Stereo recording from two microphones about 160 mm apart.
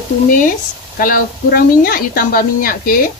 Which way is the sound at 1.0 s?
65° left (ahead or behind).